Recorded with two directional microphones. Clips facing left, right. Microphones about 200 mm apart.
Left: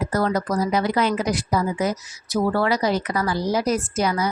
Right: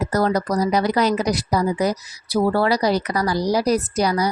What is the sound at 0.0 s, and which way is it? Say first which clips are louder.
Speech: right 2 dB; 40° right (ahead or behind).